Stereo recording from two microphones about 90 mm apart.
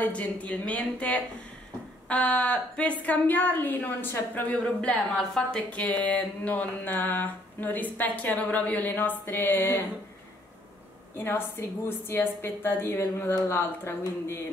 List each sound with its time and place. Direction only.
0.0 s a woman's voice: 15° left (ahead or behind)
11.1 s a woman's voice: 25° left (ahead or behind)